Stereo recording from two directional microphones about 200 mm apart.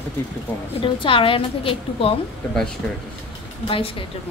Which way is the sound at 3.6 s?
25° left (ahead or behind).